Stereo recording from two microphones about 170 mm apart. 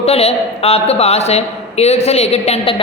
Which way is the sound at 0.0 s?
35° left (ahead or behind).